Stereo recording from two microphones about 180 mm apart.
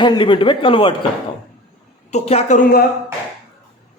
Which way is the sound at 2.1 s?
35° left (ahead or behind).